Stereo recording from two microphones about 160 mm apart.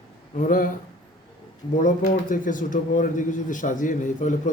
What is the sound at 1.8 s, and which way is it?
Speech, 55° left (ahead or behind).